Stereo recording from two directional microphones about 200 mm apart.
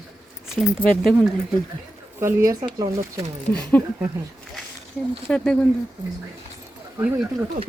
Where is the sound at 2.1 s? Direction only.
15° right (ahead or behind).